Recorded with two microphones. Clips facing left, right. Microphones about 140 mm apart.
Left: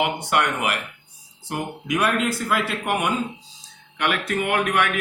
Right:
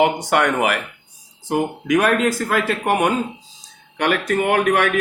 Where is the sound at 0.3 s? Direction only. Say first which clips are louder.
Right 5 dB; 50° right (ahead or behind).